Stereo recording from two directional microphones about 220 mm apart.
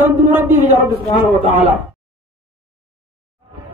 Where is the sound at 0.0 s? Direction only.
10° right (ahead or behind).